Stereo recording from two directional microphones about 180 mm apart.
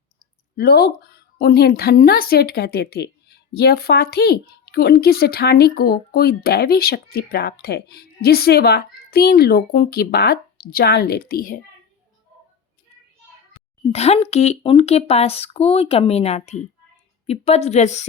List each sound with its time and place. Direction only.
0.5 s speech: 65° left (ahead or behind)
13.9 s speech: 35° left (ahead or behind)